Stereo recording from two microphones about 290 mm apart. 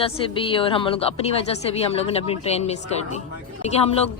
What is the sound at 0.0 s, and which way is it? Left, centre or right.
Speech, centre.